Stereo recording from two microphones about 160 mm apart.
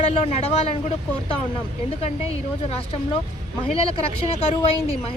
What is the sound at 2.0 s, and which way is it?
Speech, 40° left (ahead or behind).